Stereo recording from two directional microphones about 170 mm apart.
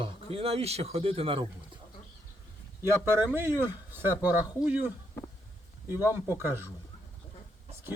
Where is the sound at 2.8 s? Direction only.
15° right (ahead or behind).